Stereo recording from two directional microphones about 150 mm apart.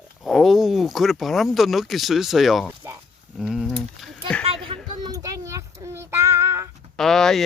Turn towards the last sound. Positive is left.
turn(degrees=5)  # may be behind; listen again after turning